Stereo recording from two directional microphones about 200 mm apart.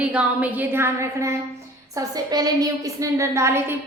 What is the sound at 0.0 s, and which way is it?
A woman's voice, 5° right (ahead or behind).